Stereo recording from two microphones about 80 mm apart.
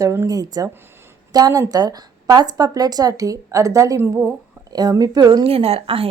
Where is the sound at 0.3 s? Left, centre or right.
Right.